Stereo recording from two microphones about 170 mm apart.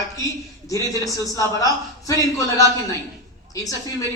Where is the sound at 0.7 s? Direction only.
20° left (ahead or behind).